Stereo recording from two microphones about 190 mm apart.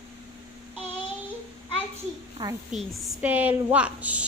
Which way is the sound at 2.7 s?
Centre (ahead or behind).